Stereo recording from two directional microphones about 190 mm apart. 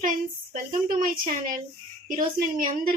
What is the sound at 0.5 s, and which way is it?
Speech, 45° right (ahead or behind).